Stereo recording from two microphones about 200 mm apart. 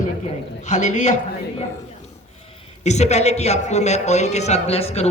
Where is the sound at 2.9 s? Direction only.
35° left (ahead or behind).